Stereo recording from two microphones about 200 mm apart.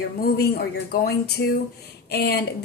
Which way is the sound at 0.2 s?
50° left (ahead or behind).